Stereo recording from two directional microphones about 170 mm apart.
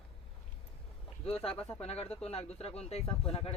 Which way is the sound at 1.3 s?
35° left (ahead or behind).